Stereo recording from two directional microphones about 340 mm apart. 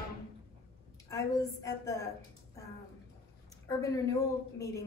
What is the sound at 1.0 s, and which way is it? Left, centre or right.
A woman's voice, centre.